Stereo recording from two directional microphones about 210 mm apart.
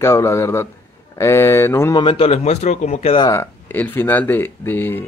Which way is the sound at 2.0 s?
25° left (ahead or behind).